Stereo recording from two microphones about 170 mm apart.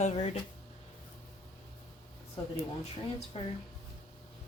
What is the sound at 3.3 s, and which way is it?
Speech, 35° left (ahead or behind).